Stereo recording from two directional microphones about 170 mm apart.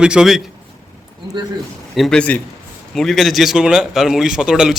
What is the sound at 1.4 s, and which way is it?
Speech, 25° right (ahead or behind).